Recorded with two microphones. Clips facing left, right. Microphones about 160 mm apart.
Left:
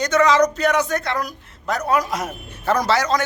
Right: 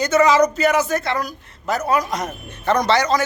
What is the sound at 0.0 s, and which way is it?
A man's voice, 5° right (ahead or behind).